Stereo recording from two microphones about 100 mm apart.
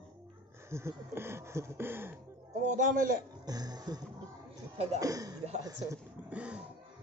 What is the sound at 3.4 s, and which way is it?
Music, 40° right (ahead or behind).